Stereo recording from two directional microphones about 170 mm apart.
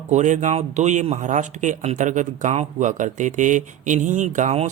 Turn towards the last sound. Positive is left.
turn(degrees=-40)  # may be behind; listen again after turning